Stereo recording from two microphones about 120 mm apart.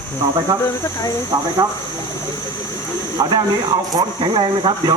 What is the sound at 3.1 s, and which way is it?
Speech, 35° right (ahead or behind).